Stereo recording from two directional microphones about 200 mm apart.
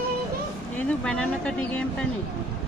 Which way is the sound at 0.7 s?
5° left (ahead or behind).